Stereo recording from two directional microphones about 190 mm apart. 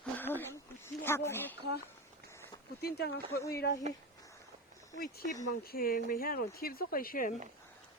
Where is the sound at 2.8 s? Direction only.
60° left (ahead or behind).